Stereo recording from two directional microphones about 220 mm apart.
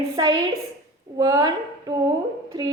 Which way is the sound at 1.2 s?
15° right (ahead or behind).